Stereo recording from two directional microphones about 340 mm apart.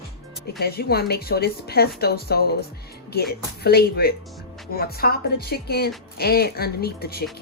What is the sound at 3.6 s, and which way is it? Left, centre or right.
A woman's voice, left.